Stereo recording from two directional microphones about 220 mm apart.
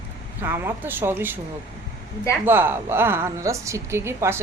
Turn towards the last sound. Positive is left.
turn(degrees=-10)  # may be behind; listen again after turning